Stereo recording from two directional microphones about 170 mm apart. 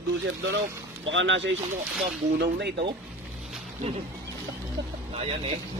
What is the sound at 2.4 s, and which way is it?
Speech, 80° right.